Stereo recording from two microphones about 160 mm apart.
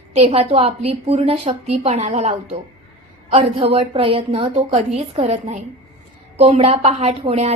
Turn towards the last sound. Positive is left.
turn(degrees=-40)  # may be behind; listen again after turning